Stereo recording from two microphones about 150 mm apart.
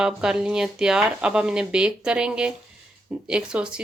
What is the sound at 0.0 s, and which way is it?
Speech, 5° right (ahead or behind).